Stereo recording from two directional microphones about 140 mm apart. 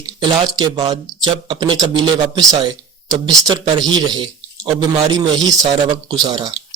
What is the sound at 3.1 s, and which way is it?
Speech, 30° right (ahead or behind).